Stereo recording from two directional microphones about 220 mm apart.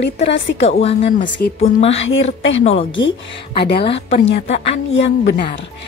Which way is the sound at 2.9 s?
60° left (ahead or behind).